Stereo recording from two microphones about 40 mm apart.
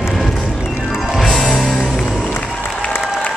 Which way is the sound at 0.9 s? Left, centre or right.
Centre.